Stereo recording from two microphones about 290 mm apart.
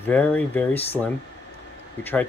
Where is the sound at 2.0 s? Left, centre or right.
Centre.